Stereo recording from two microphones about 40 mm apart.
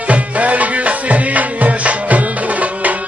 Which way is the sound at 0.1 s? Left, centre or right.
Right.